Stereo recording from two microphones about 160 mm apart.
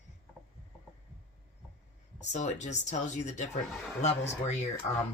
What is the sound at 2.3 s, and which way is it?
Speech, 45° left (ahead or behind).